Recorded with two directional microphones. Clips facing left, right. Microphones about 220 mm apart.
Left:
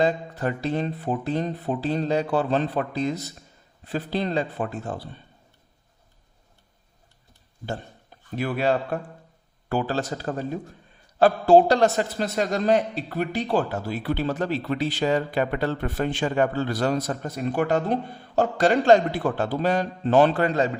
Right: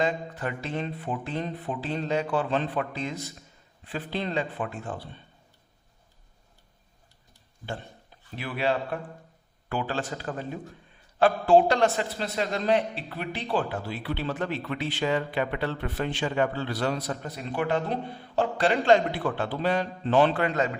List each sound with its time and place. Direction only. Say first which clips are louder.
0.0 s speech: left 5 dB; 35° left (ahead or behind)
8.4 s a man's voice: left 4 dB; 45° left (ahead or behind)